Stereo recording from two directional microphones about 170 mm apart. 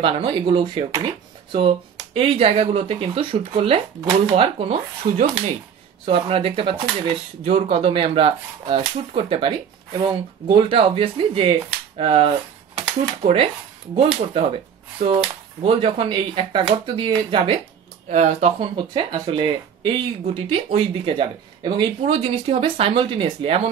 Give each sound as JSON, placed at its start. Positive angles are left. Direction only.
{"t": 0.0, "sound": "speech", "side_deg": -30}
{"t": 15.0, "sound": "speech", "side_deg": -60}
{"t": 15.6, "sound": "speech", "side_deg": -30}
{"t": 18.0, "sound": "speech", "side_deg": -40}